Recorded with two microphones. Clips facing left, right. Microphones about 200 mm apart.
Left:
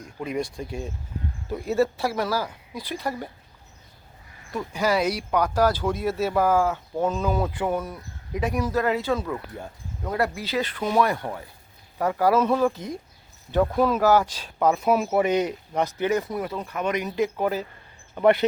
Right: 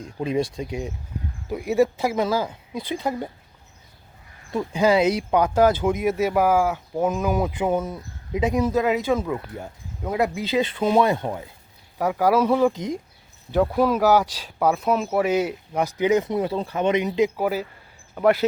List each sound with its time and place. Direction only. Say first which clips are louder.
0.0 s speech: right 5 dB; 25° right (ahead or behind)
4.5 s speech: right 5 dB; 25° right (ahead or behind)
11.9 s speech: right 1 dB; 10° right (ahead or behind)
17.3 s speech: right 1 dB; 10° right (ahead or behind)